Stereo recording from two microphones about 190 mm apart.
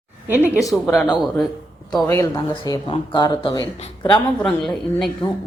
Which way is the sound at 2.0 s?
15° left (ahead or behind).